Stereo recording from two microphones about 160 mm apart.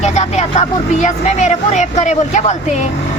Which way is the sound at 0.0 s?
45° left (ahead or behind).